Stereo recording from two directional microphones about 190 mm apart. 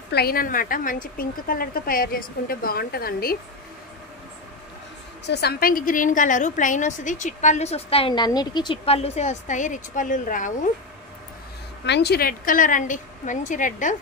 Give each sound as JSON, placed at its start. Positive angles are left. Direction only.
{"t": 0.1, "sound": "a woman's voice", "side_deg": 55}
{"t": 5.2, "sound": "a woman's voice", "side_deg": 60}
{"t": 11.8, "sound": "a woman's voice", "side_deg": 60}